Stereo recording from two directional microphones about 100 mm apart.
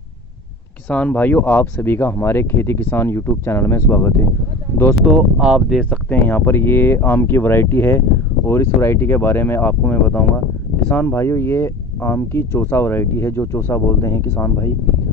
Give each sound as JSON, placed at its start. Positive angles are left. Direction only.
{"t": 0.8, "sound": "speech", "side_deg": 15}
{"t": 5.1, "sound": "speech", "side_deg": -5}
{"t": 5.8, "sound": "speech", "side_deg": 15}